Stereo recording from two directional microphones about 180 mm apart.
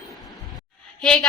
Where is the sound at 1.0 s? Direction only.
5° left (ahead or behind).